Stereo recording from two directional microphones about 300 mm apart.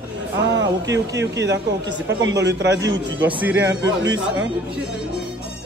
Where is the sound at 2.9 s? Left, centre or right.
Centre.